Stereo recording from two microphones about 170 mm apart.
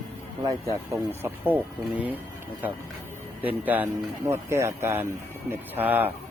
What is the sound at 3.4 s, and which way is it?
A man's voice, 10° right (ahead or behind).